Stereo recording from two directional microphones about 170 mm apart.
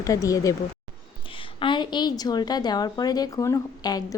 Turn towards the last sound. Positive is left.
turn(degrees=20)  # may be behind; listen again after turning